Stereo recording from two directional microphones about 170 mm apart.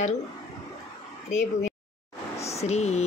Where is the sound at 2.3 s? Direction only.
40° left (ahead or behind).